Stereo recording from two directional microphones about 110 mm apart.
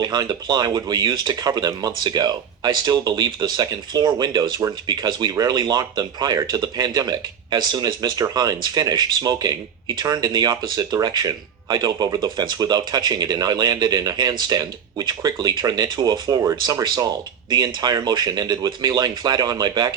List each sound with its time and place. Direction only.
0.0 s speech: 40° right (ahead or behind)